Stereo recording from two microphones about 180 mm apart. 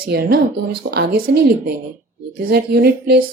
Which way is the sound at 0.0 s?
55° right (ahead or behind).